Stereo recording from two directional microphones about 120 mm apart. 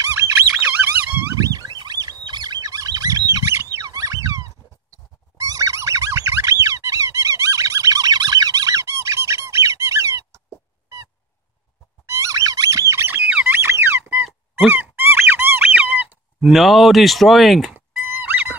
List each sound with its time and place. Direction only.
0.0 s squeak: 20° right (ahead or behind)
1.3 s rodents: 30° right (ahead or behind)
3.7 s a sound: 30° right (ahead or behind)
5.4 s squeak: 30° right (ahead or behind)
12.1 s squeak: 25° right (ahead or behind); by 17.7 s centre (ahead or behind)
17.7 s a sound: 15° right (ahead or behind)